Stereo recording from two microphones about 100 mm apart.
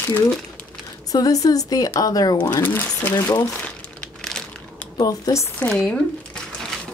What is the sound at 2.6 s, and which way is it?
Speech, 20° left (ahead or behind).